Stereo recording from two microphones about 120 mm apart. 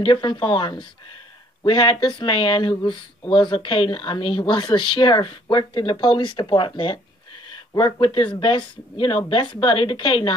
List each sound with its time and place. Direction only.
0.0 s speech: 40° left (ahead or behind)